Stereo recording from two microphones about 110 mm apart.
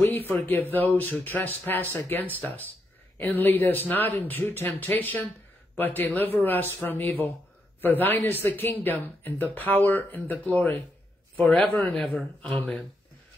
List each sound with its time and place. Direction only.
0.0 s speech: 15° left (ahead or behind)
11.9 s speech: 5° left (ahead or behind)